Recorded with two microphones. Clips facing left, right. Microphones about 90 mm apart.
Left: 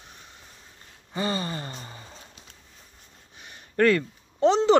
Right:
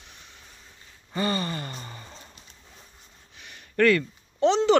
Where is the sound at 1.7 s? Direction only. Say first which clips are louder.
Right 1 dB; 15° left (ahead or behind).